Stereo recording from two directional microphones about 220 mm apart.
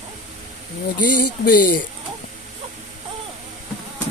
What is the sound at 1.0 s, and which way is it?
Speech, 40° left (ahead or behind).